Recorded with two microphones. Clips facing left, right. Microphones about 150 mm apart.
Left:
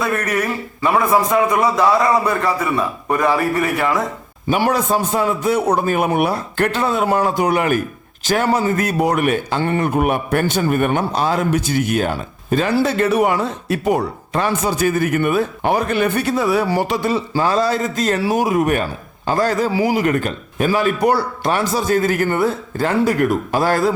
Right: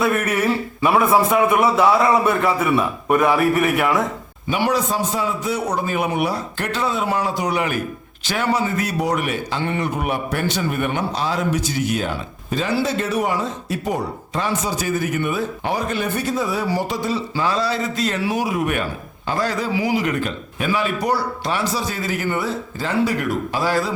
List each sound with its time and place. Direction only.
0.9 s a man's voice: 5° right (ahead or behind)
4.4 s a man's voice: 45° left (ahead or behind); by 17.2 s 65° left (ahead or behind)
17.3 s a man's voice: 45° left (ahead or behind)